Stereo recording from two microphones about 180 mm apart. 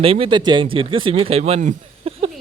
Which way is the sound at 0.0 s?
30° right (ahead or behind).